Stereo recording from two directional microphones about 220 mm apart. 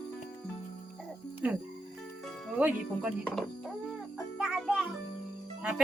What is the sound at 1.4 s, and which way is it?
Speech, 5° right (ahead or behind).